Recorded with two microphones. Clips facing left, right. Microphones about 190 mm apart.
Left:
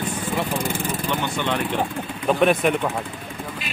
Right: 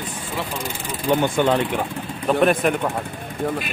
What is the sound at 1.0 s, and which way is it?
Speech, 45° right (ahead or behind).